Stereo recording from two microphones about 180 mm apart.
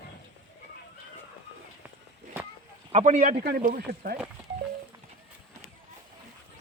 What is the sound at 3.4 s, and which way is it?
Speech, 55° right (ahead or behind).